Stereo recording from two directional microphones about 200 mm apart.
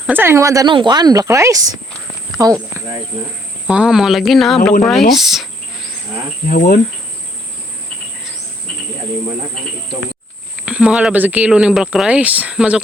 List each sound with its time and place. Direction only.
0.1 s speech: 10° right (ahead or behind)
3.7 s speech: 5° right (ahead or behind)
6.5 s cricket: 45° left (ahead or behind)
10.7 s speech: 5° right (ahead or behind)